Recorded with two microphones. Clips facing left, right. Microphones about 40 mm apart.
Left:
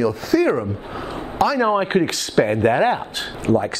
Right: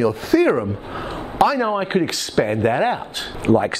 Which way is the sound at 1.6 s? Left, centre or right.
Centre.